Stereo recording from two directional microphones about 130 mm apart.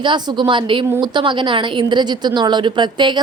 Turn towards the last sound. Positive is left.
turn(degrees=-35)  # may be behind; listen again after turning